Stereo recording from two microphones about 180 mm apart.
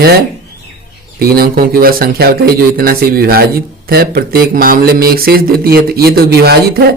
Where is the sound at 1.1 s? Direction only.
55° right (ahead or behind).